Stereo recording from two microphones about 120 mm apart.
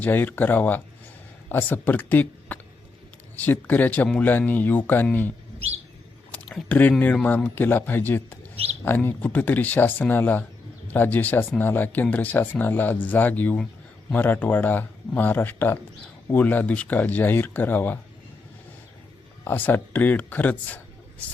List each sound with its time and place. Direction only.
0.0 s speech: 15° left (ahead or behind)
6.3 s a sound: 10° left (ahead or behind)
7.0 s speech: 15° left (ahead or behind)
19.5 s speech: 15° left (ahead or behind)